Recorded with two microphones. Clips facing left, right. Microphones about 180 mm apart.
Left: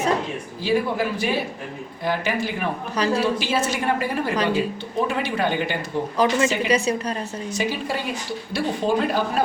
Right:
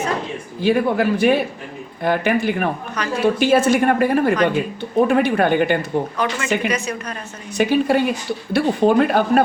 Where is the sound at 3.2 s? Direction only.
55° right (ahead or behind).